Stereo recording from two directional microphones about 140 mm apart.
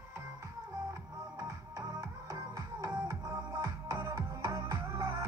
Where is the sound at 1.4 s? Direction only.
30° right (ahead or behind).